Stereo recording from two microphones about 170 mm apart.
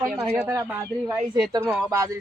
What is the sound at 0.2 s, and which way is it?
Speech, 5° right (ahead or behind).